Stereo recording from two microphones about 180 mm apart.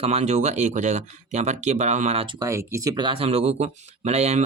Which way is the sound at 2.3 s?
15° right (ahead or behind).